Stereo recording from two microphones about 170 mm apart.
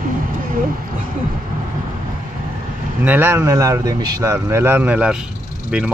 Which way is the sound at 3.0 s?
10° right (ahead or behind).